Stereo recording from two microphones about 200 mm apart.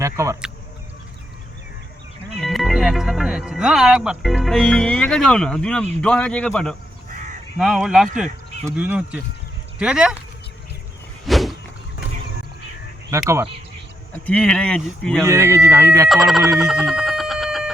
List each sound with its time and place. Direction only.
0.0 s speech: 15° right (ahead or behind)
2.4 s speech: centre (ahead or behind)
7.1 s crow: 40° right (ahead or behind)
7.6 s speech: centre (ahead or behind)
11.3 s a sound: centre (ahead or behind)
13.1 s speech: 15° right (ahead or behind)
14.3 s speech: 5° left (ahead or behind)
15.2 s speech: 15° right (ahead or behind)
16.0 s speech: centre (ahead or behind)
16.5 s a sound: centre (ahead or behind)